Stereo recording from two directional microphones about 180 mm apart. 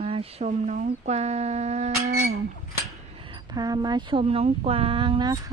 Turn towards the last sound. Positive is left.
turn(degrees=-25)  # may be behind; listen again after turning